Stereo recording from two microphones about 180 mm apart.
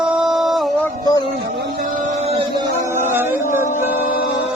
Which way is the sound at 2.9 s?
10° right (ahead or behind).